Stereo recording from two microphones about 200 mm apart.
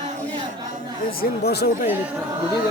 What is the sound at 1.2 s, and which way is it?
Speech, 50° left (ahead or behind).